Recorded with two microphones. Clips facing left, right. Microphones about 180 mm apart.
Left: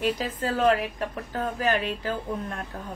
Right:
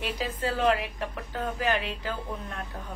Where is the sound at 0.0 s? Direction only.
45° left (ahead or behind).